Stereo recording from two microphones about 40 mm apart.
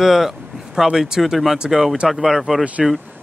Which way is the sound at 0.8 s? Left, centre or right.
Centre.